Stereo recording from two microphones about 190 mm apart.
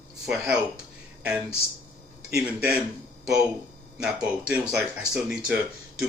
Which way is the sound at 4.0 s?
5° right (ahead or behind).